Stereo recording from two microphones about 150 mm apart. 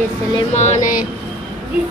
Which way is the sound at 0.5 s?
50° left (ahead or behind).